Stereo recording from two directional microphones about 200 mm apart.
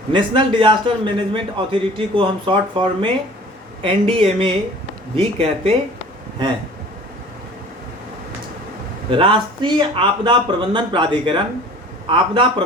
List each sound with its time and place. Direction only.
0.1 s speech: 25° right (ahead or behind)
9.0 s speech: 25° right (ahead or behind)